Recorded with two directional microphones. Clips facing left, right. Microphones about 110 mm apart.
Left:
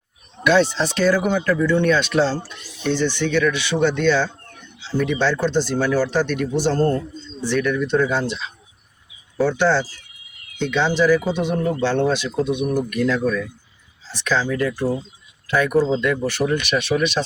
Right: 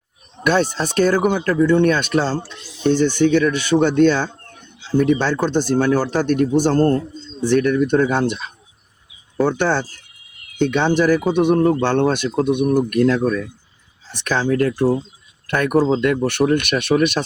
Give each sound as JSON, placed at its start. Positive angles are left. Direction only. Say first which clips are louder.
{"t": 0.4, "sound": "speech", "louder": "left 1 dB", "side_deg": -45}